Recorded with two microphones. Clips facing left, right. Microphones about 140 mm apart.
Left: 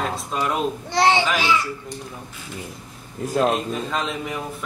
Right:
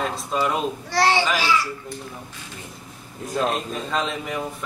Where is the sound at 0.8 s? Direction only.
20° left (ahead or behind).